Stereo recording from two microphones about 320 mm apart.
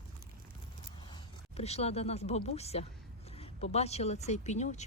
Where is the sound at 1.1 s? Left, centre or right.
Centre.